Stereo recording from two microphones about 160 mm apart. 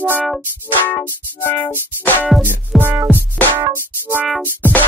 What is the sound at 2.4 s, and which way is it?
Music, 10° right (ahead or behind).